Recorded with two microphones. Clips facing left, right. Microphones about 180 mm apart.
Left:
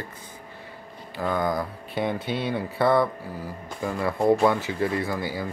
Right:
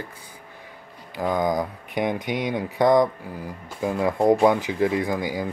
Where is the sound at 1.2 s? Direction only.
15° right (ahead or behind).